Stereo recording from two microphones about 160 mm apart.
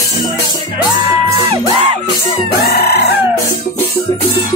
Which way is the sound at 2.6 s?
75° left (ahead or behind).